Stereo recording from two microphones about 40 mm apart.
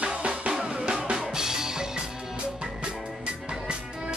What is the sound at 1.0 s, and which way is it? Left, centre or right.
Drum kit, centre.